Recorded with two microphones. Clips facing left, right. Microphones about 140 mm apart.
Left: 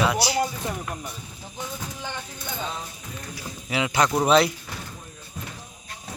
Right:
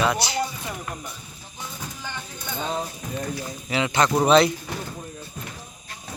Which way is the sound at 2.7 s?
40° right (ahead or behind).